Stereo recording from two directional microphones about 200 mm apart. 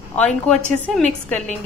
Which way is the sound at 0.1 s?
5° left (ahead or behind).